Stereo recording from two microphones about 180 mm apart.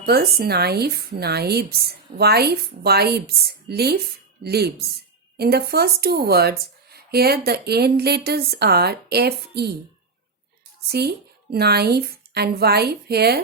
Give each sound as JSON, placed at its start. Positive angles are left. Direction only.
{"t": 0.0, "sound": "a woman's voice", "side_deg": -60}
{"t": 11.5, "sound": "a woman's voice", "side_deg": -60}